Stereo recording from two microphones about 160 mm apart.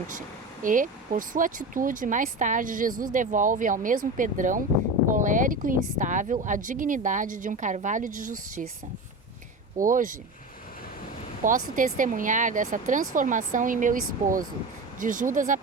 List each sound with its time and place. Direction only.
0.6 s speech: 55° right (ahead or behind)
9.7 s speech: 55° right (ahead or behind)
11.4 s speech: 55° right (ahead or behind)